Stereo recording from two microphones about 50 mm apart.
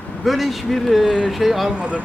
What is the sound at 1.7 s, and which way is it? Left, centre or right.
Speech, right.